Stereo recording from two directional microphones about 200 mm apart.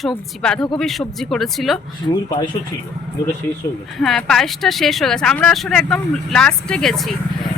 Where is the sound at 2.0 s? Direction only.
25° left (ahead or behind).